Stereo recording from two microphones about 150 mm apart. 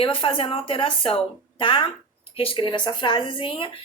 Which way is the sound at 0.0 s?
35° left (ahead or behind).